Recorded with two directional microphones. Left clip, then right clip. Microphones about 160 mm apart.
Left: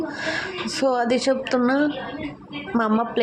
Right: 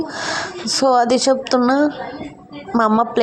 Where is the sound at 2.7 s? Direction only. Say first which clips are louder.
Right 7 dB; 20° right (ahead or behind).